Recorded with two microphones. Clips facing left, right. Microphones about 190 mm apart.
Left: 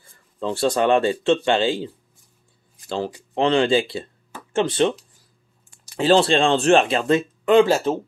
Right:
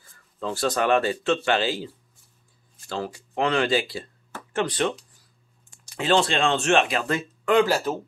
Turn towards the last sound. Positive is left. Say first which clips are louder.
# left 5 dB
turn(degrees=25)  # may be behind; listen again after turning